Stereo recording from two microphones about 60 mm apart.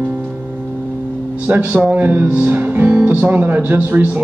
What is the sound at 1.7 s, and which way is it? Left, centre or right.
Speech, right.